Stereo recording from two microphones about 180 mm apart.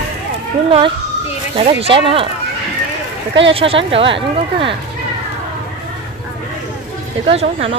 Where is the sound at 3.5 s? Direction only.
30° right (ahead or behind).